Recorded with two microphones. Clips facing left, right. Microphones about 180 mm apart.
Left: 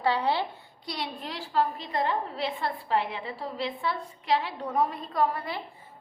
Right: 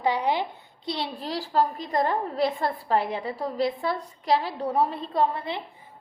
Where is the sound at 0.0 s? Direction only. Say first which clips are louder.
Right 2 dB; 15° right (ahead or behind).